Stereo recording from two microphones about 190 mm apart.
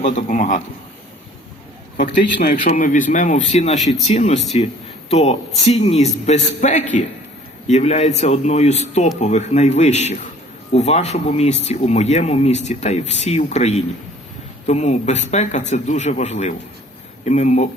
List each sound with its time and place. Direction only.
0.0 s speech: 40° left (ahead or behind)
2.3 s speech: 50° left (ahead or behind)